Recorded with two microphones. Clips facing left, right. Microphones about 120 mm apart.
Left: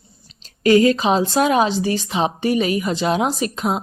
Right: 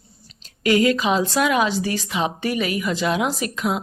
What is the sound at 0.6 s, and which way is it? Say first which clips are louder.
A woman's voice: left 4 dB; 30° left (ahead or behind).